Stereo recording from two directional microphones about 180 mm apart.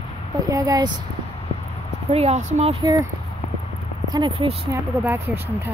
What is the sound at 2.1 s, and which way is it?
Speech, 35° right (ahead or behind).